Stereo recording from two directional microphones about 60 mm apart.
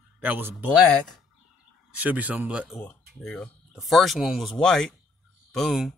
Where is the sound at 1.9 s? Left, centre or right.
Right.